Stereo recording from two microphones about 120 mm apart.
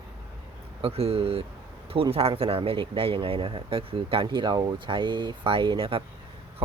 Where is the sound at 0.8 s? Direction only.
55° right (ahead or behind).